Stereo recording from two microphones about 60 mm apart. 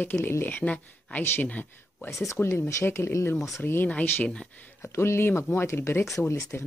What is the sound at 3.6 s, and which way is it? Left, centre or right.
Speech, left.